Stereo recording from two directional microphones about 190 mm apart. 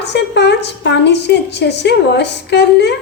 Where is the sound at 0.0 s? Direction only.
65° left (ahead or behind).